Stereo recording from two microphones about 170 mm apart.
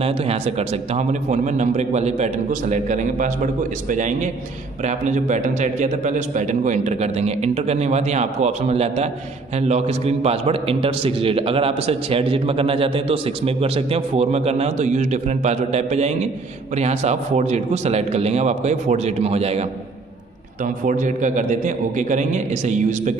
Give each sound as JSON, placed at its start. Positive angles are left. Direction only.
{"t": 0.0, "sound": "a man's voice", "side_deg": -35}
{"t": 20.8, "sound": "a man's voice", "side_deg": -45}